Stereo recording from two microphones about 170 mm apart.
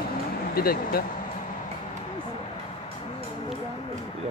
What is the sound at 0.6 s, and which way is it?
Speech, 65° left (ahead or behind).